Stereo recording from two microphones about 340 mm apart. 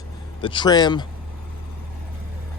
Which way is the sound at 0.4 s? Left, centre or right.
Centre.